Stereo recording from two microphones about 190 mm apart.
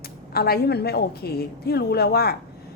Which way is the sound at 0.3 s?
55° left (ahead or behind).